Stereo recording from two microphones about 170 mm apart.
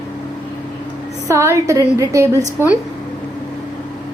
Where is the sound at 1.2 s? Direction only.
15° right (ahead or behind).